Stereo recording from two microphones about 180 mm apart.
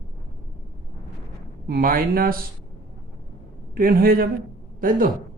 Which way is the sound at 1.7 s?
55° right (ahead or behind).